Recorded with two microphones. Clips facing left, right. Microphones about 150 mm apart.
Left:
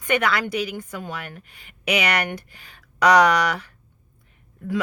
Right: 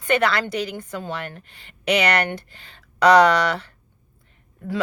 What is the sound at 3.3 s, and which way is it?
Speech, 30° right (ahead or behind).